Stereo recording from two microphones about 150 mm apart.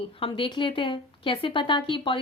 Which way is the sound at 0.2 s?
35° left (ahead or behind).